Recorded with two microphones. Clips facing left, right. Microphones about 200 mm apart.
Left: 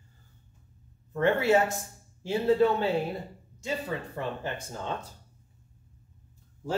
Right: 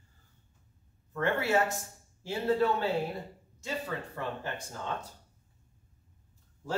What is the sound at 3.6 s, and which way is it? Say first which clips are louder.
Speech: left 3 dB; 20° left (ahead or behind).